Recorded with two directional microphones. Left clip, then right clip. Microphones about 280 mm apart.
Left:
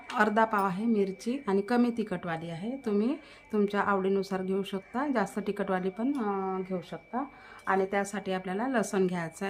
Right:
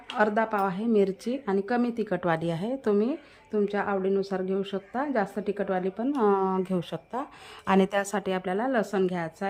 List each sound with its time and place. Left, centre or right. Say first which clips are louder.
0.2 s a woman's voice: right 1 dB; centre
6.2 s a woman's voice: right 8 dB; right; by 9.5 s centre